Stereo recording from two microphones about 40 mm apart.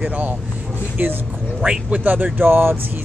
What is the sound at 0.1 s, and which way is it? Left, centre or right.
Speech, right.